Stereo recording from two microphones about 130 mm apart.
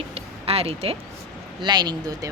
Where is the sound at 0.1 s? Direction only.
50° right (ahead or behind).